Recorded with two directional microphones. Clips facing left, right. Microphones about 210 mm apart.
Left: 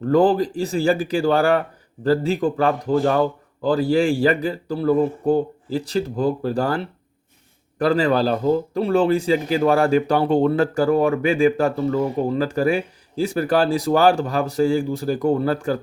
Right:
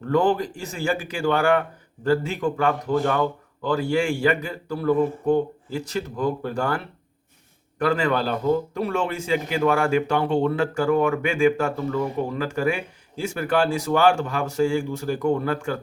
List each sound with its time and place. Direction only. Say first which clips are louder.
0.0 s speech: left 4 dB; 35° left (ahead or behind)